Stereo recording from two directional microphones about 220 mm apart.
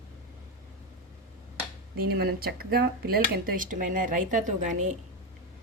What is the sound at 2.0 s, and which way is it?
Speech, 45° right (ahead or behind).